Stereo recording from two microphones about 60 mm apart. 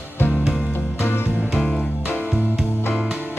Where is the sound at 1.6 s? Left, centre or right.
Centre.